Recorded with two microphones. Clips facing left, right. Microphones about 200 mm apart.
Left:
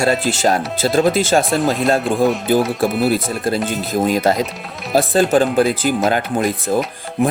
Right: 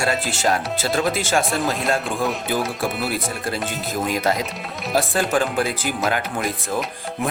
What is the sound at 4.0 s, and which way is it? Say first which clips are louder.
Speech: left 6 dB; 35° left (ahead or behind).